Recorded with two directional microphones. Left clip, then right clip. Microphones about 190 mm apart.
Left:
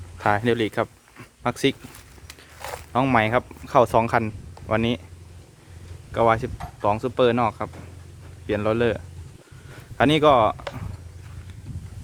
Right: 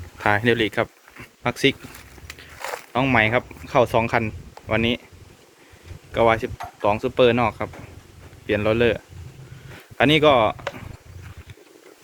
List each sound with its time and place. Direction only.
0.2 s speech: 10° left (ahead or behind)
2.2 s walk: centre (ahead or behind)
2.9 s speech: 20° left (ahead or behind)
6.1 s speech: 10° left (ahead or behind)
10.0 s speech: 15° left (ahead or behind)